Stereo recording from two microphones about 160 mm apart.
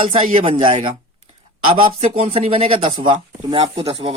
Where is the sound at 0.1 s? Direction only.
40° right (ahead or behind).